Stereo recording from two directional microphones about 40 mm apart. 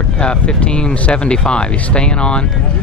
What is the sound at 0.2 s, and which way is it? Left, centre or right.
Speech, left.